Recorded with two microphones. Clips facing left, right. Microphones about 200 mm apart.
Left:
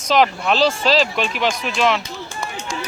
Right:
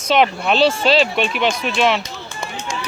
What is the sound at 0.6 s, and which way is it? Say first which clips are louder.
Speech: right 2 dB; 40° left (ahead or behind).